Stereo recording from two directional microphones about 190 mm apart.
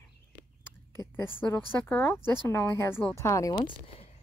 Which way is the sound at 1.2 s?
10° left (ahead or behind).